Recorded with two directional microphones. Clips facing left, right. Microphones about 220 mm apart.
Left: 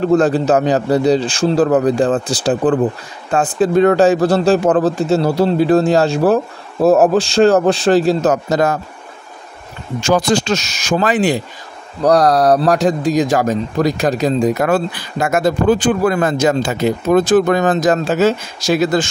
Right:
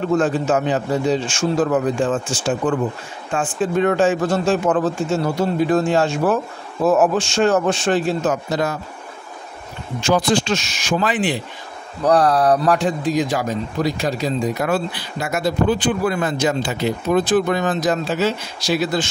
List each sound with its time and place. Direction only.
0.0 s speech: 35° left (ahead or behind)
10.0 s speech: 45° left (ahead or behind)